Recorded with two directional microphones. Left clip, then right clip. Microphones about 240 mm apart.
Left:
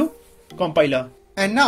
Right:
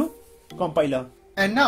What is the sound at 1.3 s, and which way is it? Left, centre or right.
Speech, centre.